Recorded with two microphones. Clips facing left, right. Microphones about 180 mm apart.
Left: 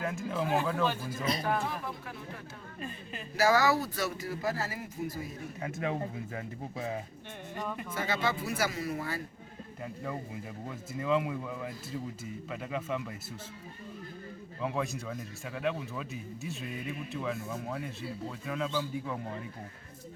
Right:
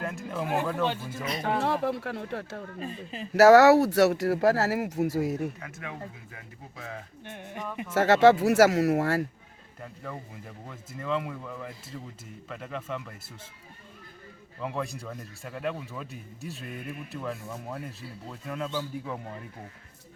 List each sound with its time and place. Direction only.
0.0 s speech: centre (ahead or behind)
1.2 s speech: 35° left (ahead or behind)
1.5 s speech: 75° right (ahead or behind)
2.8 s speech: 30° right (ahead or behind)
3.3 s speech: 70° right (ahead or behind)
5.5 s speech: 30° left (ahead or behind)
7.9 s speech: 80° right
9.8 s speech: 10° left (ahead or behind)
14.6 s speech: centre (ahead or behind)